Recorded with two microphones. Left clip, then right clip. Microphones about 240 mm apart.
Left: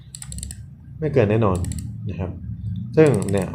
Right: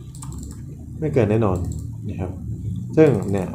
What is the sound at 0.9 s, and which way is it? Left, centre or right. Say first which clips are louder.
Speech: left 1 dB; centre.